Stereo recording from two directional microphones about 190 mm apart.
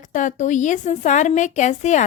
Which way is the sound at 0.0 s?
40° left (ahead or behind).